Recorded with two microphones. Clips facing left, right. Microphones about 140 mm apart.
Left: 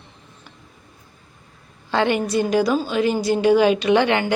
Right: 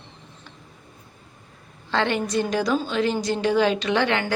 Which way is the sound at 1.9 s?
10° left (ahead or behind).